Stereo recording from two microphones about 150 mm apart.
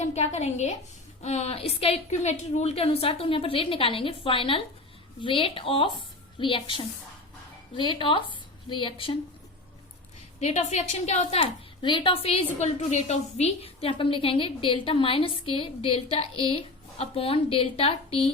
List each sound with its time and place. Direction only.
0.0 s a woman's voice: 50° left (ahead or behind)
10.4 s a woman's voice: 50° left (ahead or behind)